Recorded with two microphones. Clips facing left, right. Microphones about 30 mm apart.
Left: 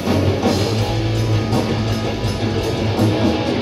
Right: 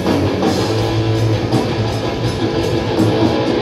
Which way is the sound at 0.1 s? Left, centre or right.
Centre.